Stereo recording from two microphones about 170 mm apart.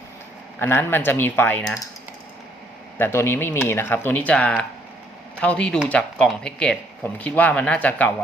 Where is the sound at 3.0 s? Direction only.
15° left (ahead or behind).